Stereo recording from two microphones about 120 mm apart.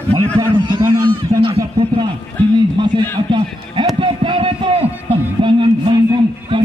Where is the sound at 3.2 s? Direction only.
45° right (ahead or behind).